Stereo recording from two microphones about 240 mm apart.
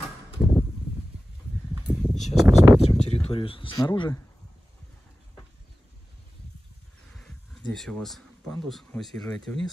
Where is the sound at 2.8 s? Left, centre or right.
Left.